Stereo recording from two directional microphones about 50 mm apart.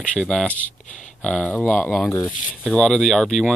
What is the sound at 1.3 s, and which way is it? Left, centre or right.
Speech, left.